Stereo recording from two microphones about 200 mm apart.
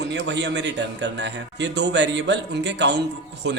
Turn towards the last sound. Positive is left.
turn(degrees=-60)  # may be behind; listen again after turning